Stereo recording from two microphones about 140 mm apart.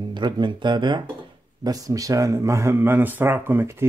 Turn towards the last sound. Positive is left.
turn(degrees=-15)  # may be behind; listen again after turning